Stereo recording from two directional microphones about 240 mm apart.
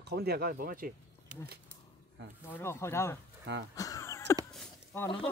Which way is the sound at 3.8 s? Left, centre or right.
Centre.